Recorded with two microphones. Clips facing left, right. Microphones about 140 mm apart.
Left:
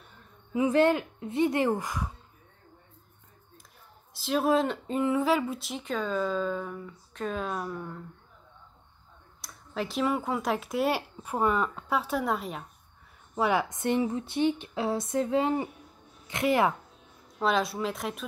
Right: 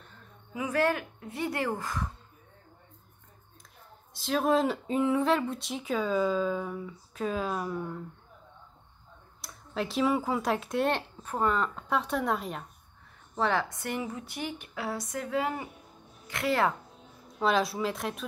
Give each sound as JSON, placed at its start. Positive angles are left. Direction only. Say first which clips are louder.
{"t": 0.6, "sound": "a woman's voice", "louder": "left 5 dB", "side_deg": 25}
{"t": 4.1, "sound": "speech", "louder": "left 1 dB", "side_deg": 5}
{"t": 9.4, "sound": "speech", "louder": "even", "side_deg": 0}
{"t": 13.3, "sound": "a woman's voice", "louder": "left 2 dB", "side_deg": 10}
{"t": 17.4, "sound": "speech", "louder": "even", "side_deg": 0}